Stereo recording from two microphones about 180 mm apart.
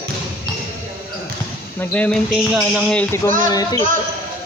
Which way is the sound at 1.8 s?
10° left (ahead or behind).